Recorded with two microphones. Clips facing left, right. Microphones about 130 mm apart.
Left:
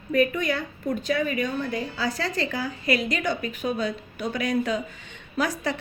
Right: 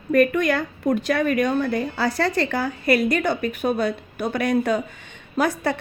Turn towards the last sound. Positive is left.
turn(degrees=-60)  # may be behind; listen again after turning